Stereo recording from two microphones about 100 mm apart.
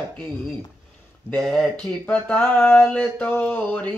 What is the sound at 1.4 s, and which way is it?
Speech, 5° left (ahead or behind).